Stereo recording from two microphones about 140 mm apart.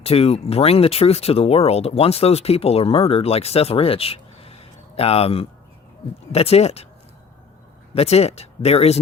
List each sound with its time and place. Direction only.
0.0 s speech: 45° left (ahead or behind)
7.9 s speech: 50° left (ahead or behind)